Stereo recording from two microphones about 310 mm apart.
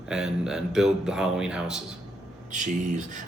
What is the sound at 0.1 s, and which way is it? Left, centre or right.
A man's voice, centre.